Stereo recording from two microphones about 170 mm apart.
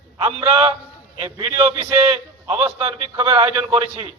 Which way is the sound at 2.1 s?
35° right (ahead or behind).